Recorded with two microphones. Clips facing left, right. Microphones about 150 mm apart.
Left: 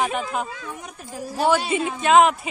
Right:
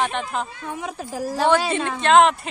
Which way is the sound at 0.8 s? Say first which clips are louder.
Right 6 dB; 90° right.